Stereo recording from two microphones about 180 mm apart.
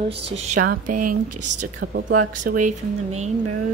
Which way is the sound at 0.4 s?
45° right (ahead or behind).